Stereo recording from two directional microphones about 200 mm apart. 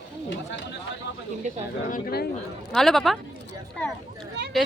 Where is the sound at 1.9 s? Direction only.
50° left (ahead or behind).